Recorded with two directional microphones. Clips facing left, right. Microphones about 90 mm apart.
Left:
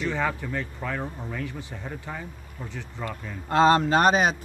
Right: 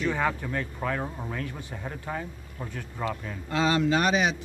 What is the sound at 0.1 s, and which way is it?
Speech, 10° right (ahead or behind).